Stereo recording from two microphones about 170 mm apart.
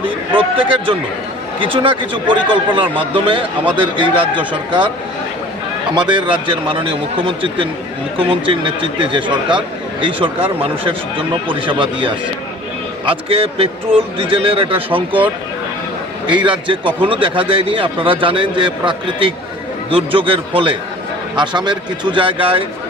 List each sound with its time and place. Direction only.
0.0 s speech: 30° right (ahead or behind)
5.9 s a man's voice: 25° right (ahead or behind)
16.3 s a man's voice: 30° right (ahead or behind)